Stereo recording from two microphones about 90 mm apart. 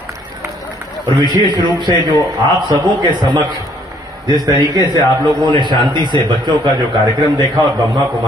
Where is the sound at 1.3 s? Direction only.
60° right (ahead or behind).